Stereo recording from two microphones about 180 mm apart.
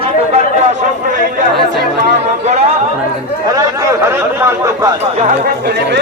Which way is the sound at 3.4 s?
20° right (ahead or behind).